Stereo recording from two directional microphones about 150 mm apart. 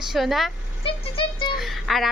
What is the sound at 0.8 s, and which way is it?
Music, 35° left (ahead or behind).